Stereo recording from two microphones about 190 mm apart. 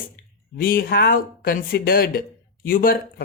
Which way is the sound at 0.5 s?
50° left (ahead or behind).